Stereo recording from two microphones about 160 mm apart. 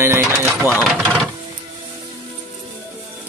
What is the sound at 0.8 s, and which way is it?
Speech, 5° left (ahead or behind).